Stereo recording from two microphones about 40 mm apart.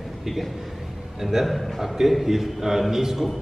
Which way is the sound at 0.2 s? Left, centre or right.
Centre.